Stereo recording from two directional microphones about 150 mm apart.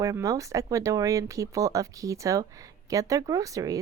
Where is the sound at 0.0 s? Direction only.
20° right (ahead or behind).